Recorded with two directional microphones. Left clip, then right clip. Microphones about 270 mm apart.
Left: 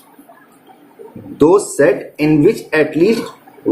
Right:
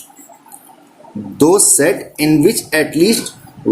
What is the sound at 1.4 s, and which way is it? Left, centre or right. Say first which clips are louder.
Speech: left 1 dB; right.